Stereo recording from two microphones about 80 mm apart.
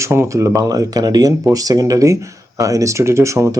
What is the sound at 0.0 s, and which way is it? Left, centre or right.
Speech, right.